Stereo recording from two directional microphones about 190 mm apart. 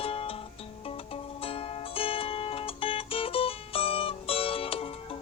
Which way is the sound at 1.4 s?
30° left (ahead or behind).